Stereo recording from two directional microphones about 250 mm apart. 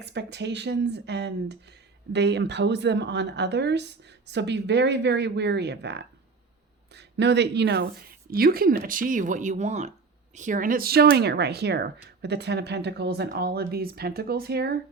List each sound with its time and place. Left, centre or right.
0.0 s a woman's voice: right